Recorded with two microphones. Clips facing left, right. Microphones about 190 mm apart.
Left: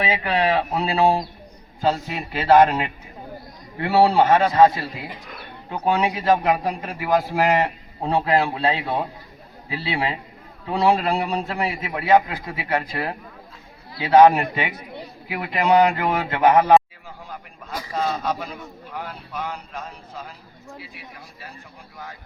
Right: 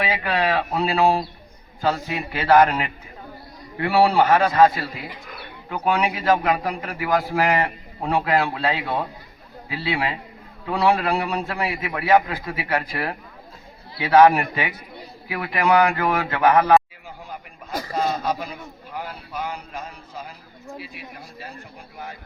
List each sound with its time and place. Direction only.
0.0 s a man's voice: 20° left (ahead or behind)
17.9 s a man's voice: 5° right (ahead or behind)